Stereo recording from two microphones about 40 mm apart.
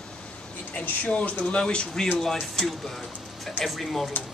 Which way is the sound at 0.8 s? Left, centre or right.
Left.